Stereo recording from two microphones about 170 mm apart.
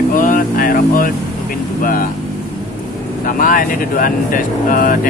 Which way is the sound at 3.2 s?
55° left (ahead or behind).